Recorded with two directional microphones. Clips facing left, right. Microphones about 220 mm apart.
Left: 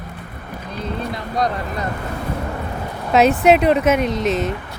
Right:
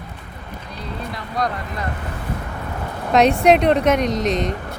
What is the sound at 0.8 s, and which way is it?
Run, 20° left (ahead or behind).